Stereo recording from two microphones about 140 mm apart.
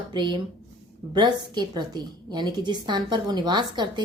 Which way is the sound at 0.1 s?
30° right (ahead or behind).